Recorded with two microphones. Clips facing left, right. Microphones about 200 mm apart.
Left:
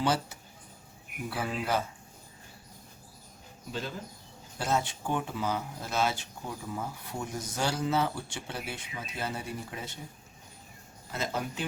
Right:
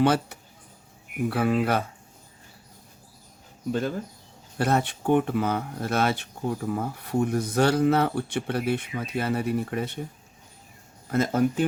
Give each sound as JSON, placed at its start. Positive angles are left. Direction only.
{"t": 0.0, "sound": "speech", "side_deg": -60}
{"t": 3.7, "sound": "speech", "side_deg": -55}
{"t": 11.1, "sound": "speech", "side_deg": -50}